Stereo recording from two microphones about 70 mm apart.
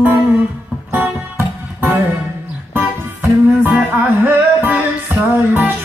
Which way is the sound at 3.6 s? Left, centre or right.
Right.